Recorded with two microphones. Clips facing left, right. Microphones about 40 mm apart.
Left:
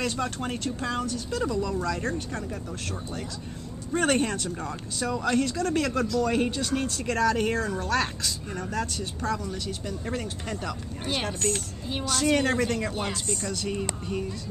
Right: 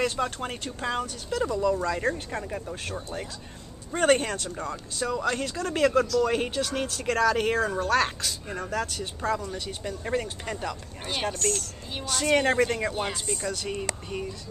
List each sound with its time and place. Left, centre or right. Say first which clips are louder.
0.0 s speech: right 2 dB; centre
7.2 s speech: right 1 dB; right
9.2 s speech: right 2 dB; centre